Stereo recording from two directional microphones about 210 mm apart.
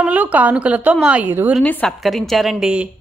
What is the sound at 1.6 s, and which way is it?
Speech, 5° left (ahead or behind).